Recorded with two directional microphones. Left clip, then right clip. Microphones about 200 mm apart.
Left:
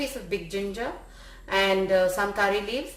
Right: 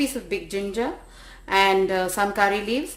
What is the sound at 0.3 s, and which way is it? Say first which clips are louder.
Speech: right 2 dB; 55° right (ahead or behind).